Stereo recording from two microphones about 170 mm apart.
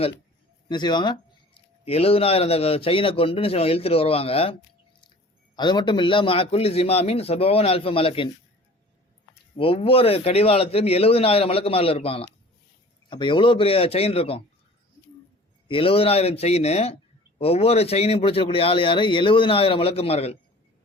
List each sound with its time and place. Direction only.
0.7 s speech: 25° left (ahead or behind)
5.5 s speech: 25° left (ahead or behind)
9.6 s speech: 35° left (ahead or behind)
15.6 s speech: 30° left (ahead or behind)